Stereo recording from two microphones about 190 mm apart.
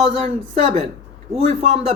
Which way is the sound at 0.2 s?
35° right (ahead or behind).